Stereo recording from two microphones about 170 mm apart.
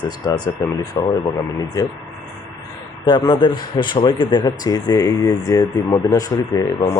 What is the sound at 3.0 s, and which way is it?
Speech, 25° left (ahead or behind).